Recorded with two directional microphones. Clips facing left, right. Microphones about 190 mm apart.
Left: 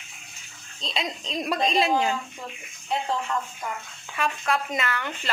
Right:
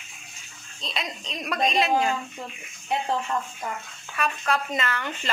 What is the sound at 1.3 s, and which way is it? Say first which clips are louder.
Speech: left 1 dB; 30° left (ahead or behind).